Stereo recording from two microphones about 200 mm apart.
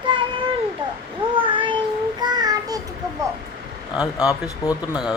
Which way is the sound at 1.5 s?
25° right (ahead or behind).